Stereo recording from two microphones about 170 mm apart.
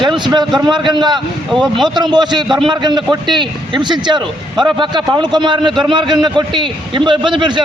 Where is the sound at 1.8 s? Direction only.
25° right (ahead or behind).